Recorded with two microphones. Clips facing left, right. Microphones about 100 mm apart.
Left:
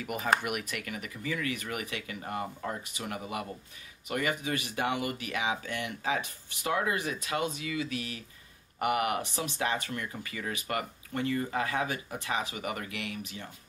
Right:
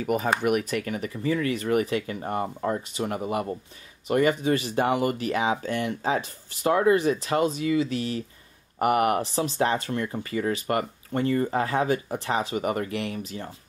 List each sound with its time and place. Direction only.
0.0 s speech: 35° right (ahead or behind)